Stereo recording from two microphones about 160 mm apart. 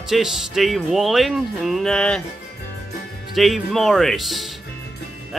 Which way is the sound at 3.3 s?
Centre (ahead or behind).